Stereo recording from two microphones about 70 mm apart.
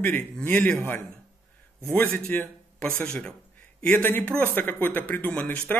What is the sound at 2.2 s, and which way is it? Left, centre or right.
A man's voice, centre.